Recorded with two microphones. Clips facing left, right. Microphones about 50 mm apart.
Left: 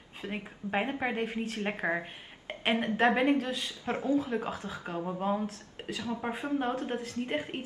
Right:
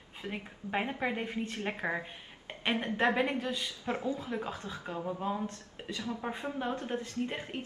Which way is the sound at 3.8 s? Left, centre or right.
Left.